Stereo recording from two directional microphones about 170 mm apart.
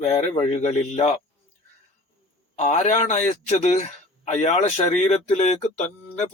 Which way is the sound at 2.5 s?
45° left (ahead or behind).